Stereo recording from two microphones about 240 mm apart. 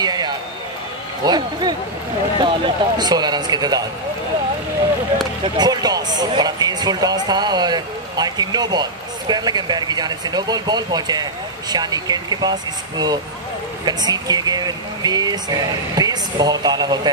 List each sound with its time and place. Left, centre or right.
0.0 s a sound: centre
1.2 s speech: centre
5.4 s speech: centre